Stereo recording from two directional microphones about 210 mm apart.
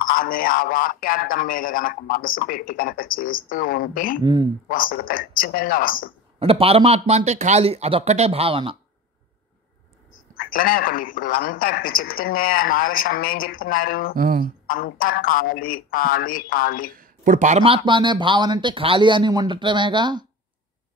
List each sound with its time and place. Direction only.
0.0 s a man's voice: 40° left (ahead or behind)
4.2 s speech: 20° right (ahead or behind)
4.6 s a man's voice: 40° left (ahead or behind)
6.4 s speech: 25° right (ahead or behind)
10.3 s a man's voice: 45° left (ahead or behind)
14.1 s a sound: 40° right (ahead or behind)
14.7 s a man's voice: 45° left (ahead or behind)
16.9 s speech: 40° right (ahead or behind); by 20.2 s 20° right (ahead or behind)